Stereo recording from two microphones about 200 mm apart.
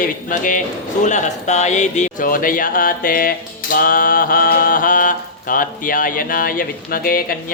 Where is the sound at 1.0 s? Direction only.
35° left (ahead or behind).